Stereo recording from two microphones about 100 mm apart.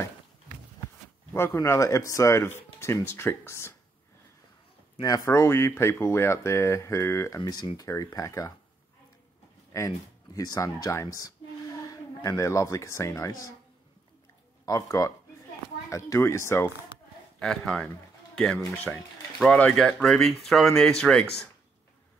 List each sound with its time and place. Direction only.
1.3 s speech: 25° left (ahead or behind)
5.0 s speech: 35° left (ahead or behind)
7.4 s speech: 45° left (ahead or behind)
9.7 s speech: 35° left (ahead or behind)
14.7 s speech: 35° left (ahead or behind)
17.4 s a man's voice: 5° left (ahead or behind)